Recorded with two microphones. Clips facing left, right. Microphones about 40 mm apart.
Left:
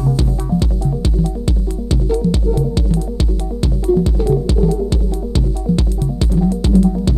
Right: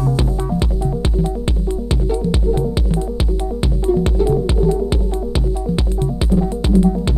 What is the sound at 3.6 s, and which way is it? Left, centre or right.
Music, centre.